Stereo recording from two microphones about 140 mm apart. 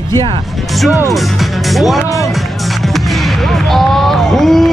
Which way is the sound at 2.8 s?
Centre (ahead or behind).